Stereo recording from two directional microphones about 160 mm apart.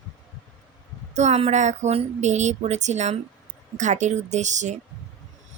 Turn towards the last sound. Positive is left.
turn(degrees=-50)  # may be behind; listen again after turning